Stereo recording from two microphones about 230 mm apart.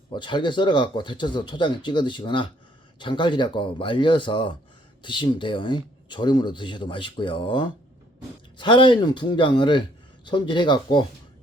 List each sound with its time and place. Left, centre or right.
0.1 s speech: centre